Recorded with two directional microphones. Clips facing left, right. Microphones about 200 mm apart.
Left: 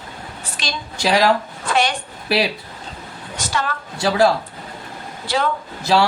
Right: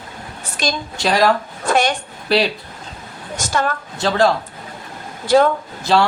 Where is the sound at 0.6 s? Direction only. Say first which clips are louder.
Right 3 dB; 45° right (ahead or behind).